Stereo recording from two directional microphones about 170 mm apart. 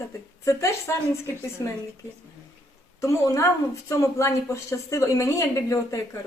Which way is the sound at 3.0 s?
20° left (ahead or behind).